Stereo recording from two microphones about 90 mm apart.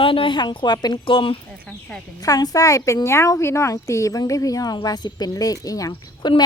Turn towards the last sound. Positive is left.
turn(degrees=55)  # may be behind; listen again after turning